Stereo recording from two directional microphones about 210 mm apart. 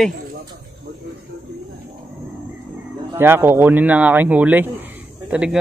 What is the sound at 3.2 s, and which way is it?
Speech, 10° right (ahead or behind).